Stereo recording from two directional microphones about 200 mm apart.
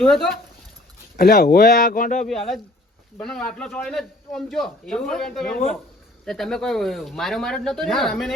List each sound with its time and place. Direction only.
0.0 s a man's voice: centre (ahead or behind)
1.1 s speech: 50° left (ahead or behind)
3.2 s a man's voice: 5° left (ahead or behind)